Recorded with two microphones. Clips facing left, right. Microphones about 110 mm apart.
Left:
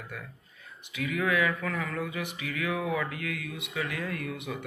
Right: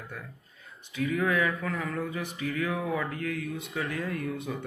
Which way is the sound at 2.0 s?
35° right (ahead or behind).